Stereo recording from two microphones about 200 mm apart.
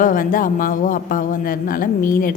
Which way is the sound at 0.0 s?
40° left (ahead or behind).